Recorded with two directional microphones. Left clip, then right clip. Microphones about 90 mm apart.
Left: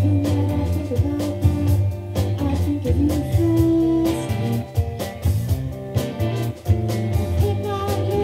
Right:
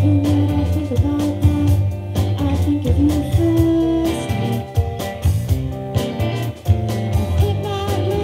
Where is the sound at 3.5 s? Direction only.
35° right (ahead or behind).